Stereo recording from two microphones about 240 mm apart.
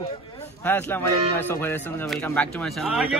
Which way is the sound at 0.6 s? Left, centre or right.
Centre.